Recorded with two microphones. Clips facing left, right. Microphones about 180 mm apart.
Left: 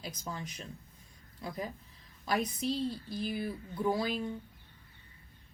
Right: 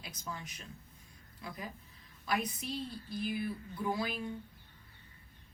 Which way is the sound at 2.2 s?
35° left (ahead or behind).